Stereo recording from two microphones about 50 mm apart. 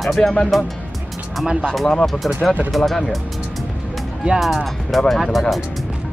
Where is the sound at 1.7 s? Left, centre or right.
Centre.